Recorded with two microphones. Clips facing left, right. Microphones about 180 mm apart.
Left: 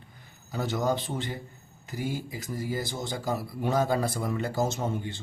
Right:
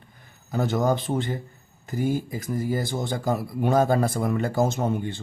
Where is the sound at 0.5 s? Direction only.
55° right (ahead or behind).